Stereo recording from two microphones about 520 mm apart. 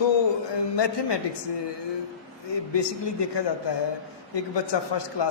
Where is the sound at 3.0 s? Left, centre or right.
Left.